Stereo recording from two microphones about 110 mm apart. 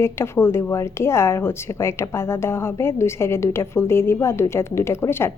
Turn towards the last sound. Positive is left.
turn(degrees=20)  # may be behind; listen again after turning